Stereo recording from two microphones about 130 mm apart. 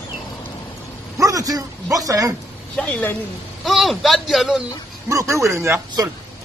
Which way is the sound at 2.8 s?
15° left (ahead or behind).